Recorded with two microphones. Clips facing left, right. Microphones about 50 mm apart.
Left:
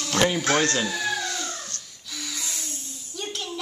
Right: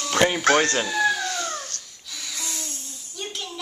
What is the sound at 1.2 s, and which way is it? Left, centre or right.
Dog, right.